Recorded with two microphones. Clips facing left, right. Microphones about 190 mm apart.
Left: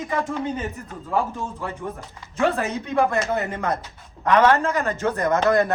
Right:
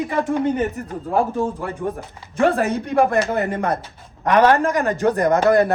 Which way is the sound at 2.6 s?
60° right (ahead or behind).